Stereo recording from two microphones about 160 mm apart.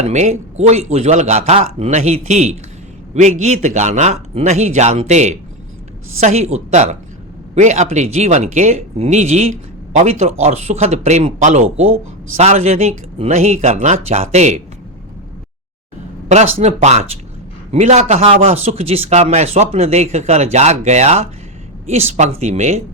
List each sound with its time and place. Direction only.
0.0 s speech: 45° right (ahead or behind)
16.3 s speech: 45° right (ahead or behind)